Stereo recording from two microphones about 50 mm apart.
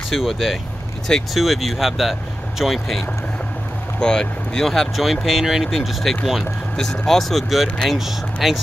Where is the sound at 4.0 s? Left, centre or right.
Centre.